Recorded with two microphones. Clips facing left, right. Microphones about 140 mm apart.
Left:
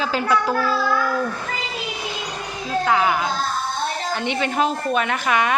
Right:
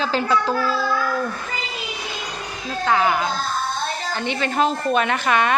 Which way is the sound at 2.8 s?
5° left (ahead or behind).